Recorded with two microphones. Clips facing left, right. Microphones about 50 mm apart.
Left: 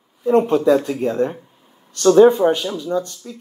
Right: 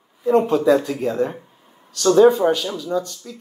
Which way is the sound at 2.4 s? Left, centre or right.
Centre.